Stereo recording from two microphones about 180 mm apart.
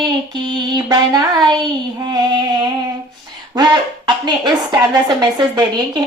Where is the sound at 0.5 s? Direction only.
25° right (ahead or behind).